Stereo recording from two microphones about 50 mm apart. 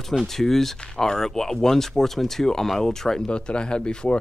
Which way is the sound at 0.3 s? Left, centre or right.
Centre.